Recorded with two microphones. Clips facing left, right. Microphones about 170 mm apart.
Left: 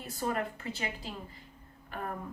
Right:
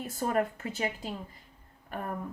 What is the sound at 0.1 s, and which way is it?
Speech, 45° right (ahead or behind).